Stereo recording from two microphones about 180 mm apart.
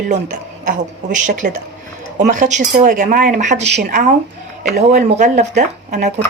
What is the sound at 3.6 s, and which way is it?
Speech, 70° right (ahead or behind).